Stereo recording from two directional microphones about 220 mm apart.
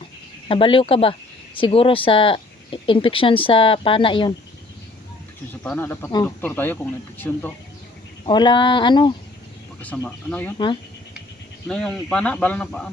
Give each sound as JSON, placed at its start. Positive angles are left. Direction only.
{"t": 0.4, "sound": "speech", "side_deg": 25}
{"t": 5.6, "sound": "speech", "side_deg": 10}
{"t": 8.3, "sound": "speech", "side_deg": 20}
{"t": 9.8, "sound": "speech", "side_deg": 5}
{"t": 11.7, "sound": "speech", "side_deg": 0}